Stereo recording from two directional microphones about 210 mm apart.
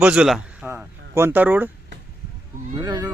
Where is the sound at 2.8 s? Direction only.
15° right (ahead or behind).